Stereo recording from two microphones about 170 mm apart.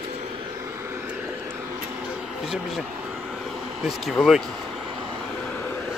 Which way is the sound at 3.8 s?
Centre (ahead or behind).